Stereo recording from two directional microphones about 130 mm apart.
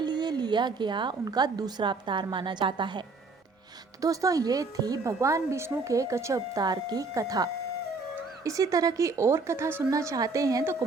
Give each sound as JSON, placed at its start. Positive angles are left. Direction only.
{"t": 0.0, "sound": "a woman's voice", "side_deg": -35}
{"t": 4.0, "sound": "a woman's voice", "side_deg": -25}